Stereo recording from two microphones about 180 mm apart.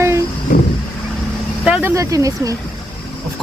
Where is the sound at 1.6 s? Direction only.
5° right (ahead or behind).